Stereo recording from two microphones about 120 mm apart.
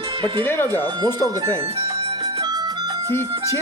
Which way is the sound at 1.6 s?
55° right (ahead or behind).